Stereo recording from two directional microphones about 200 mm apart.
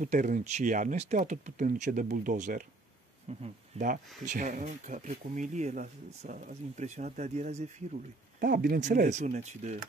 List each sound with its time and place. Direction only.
0.0 s speech: 40° right (ahead or behind)
8.4 s speech: 50° right (ahead or behind)